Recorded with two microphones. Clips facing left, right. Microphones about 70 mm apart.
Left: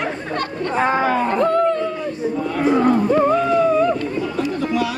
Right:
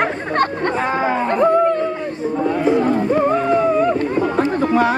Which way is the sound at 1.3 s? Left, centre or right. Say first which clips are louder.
Right 6 dB; centre.